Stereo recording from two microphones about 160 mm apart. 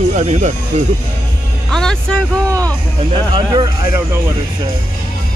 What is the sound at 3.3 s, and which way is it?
Speech, 25° right (ahead or behind).